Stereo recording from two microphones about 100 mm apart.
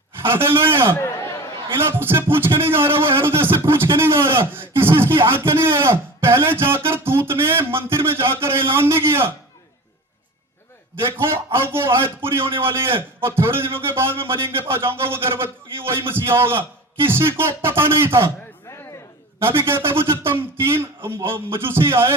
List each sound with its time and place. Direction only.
0.2 s speech: 20° right (ahead or behind)
0.9 s a sound: 25° left (ahead or behind)
1.9 s speech: 25° right (ahead or behind)
11.0 s speech: 25° right (ahead or behind)
19.4 s speech: 25° right (ahead or behind)